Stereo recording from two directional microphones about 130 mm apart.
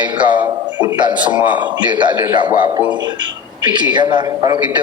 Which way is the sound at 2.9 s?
35° right (ahead or behind).